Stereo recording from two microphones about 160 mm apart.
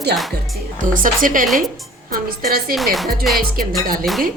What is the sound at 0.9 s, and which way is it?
Speech, 55° right (ahead or behind).